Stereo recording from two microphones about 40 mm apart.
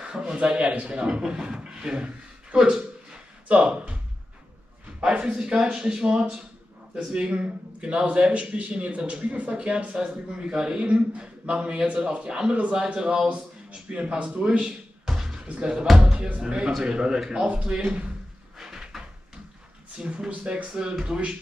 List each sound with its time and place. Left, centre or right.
0.0 s a man's voice: right
2.5 s a sound: right
5.1 s a man's voice: right
14.6 s music: centre
15.4 s a man's voice: right
18.6 s cupboard open or close: centre
20.2 s a man's voice: right